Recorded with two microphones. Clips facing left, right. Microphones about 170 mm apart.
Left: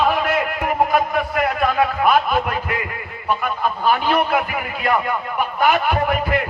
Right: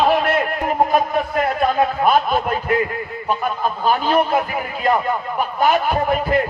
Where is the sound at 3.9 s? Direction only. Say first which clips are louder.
Right 1 dB; 35° right (ahead or behind).